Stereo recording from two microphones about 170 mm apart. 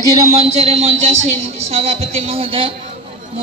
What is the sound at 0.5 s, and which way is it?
Speech, 40° right (ahead or behind).